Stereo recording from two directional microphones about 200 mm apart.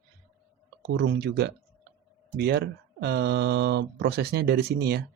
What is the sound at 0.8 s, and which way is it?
Speech, 55° right (ahead or behind).